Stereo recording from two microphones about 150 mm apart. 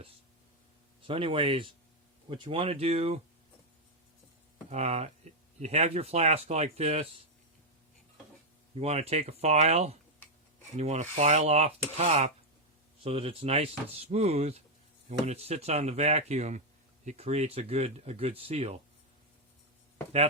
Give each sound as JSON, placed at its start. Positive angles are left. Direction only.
{"t": 1.0, "sound": "speech", "side_deg": -35}
{"t": 4.7, "sound": "speech", "side_deg": -45}
{"t": 8.7, "sound": "speech", "side_deg": -45}